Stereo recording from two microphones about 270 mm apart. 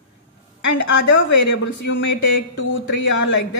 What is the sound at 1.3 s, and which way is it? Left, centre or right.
Speech, left.